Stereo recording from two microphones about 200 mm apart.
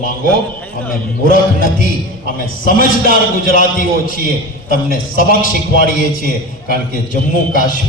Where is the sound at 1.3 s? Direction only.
45° left (ahead or behind).